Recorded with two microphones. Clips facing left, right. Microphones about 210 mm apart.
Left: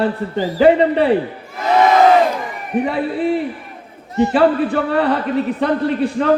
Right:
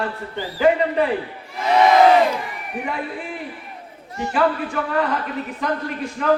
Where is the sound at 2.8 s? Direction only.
30° left (ahead or behind).